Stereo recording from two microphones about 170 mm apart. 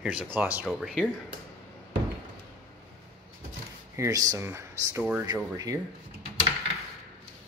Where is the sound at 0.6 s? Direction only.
5° right (ahead or behind).